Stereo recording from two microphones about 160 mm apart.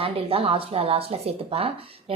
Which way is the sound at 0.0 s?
35° right (ahead or behind).